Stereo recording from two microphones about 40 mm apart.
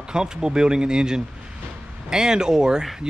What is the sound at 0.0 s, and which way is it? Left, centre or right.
Speech, centre.